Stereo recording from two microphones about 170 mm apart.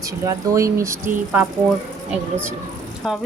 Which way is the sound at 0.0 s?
20° right (ahead or behind).